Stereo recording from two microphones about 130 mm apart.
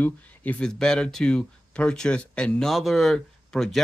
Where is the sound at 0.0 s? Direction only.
10° left (ahead or behind).